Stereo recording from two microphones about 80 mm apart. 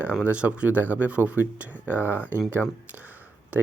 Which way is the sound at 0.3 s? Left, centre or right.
Centre.